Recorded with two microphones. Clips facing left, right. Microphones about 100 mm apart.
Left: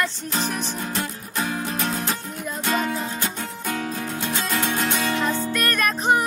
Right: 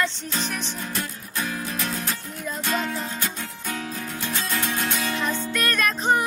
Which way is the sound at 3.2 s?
55° left (ahead or behind).